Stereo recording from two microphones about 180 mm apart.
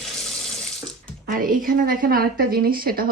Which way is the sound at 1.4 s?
50° right (ahead or behind).